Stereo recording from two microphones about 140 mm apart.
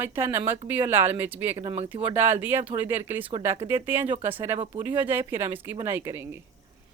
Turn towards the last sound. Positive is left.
turn(degrees=-20)  # may be behind; listen again after turning